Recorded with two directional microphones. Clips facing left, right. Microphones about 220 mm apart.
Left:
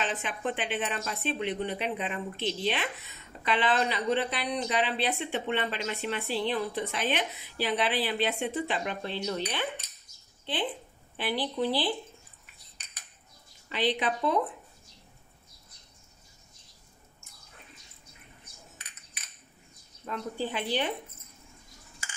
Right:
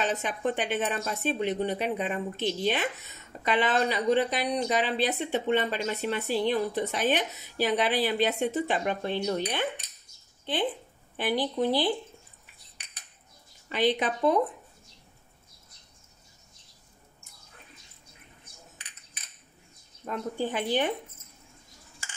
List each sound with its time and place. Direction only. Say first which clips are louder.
0.0 s speech: right 4 dB; 40° right (ahead or behind)
13.7 s speech: right 3 dB; 45° right (ahead or behind)
20.1 s speech: right 3 dB; 45° right (ahead or behind)